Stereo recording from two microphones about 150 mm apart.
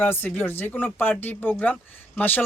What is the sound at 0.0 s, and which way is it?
Speech, 15° left (ahead or behind).